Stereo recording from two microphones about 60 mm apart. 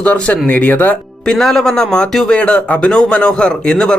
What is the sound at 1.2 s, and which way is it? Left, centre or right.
Speech, centre.